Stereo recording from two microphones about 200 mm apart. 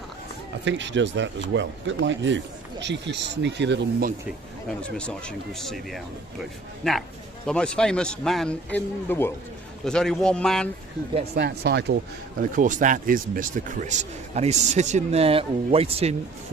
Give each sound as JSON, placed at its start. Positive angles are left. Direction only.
{"t": 0.6, "sound": "speech", "side_deg": -65}
{"t": 4.8, "sound": "speech", "side_deg": 5}
{"t": 11.3, "sound": "speech", "side_deg": -55}
{"t": 12.4, "sound": "speech", "side_deg": -40}